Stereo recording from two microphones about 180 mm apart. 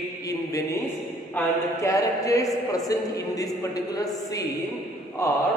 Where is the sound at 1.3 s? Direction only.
15° left (ahead or behind).